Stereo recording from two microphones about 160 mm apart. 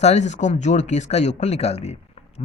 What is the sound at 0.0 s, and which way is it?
A man's voice, 45° left (ahead or behind).